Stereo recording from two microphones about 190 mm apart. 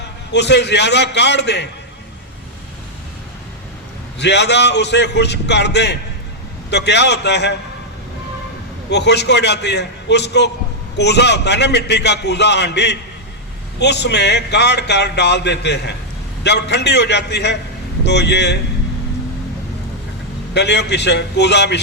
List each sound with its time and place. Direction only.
0.3 s speech: 65° left (ahead or behind)
4.2 s speech: 65° left (ahead or behind)
8.9 s speech: 65° left (ahead or behind)
20.5 s speech: 65° left (ahead or behind)